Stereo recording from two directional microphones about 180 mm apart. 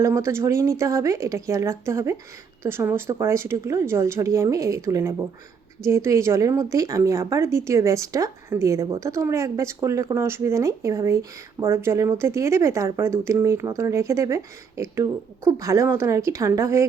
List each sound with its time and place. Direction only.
0.0 s a woman's voice: 15° right (ahead or behind)